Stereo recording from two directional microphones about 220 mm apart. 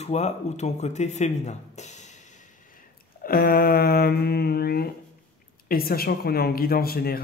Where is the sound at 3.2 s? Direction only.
45° left (ahead or behind).